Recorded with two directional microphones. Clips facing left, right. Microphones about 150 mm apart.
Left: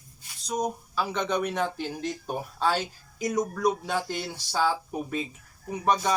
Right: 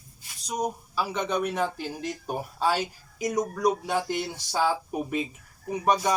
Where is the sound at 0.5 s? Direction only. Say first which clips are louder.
Even; 10° right (ahead or behind).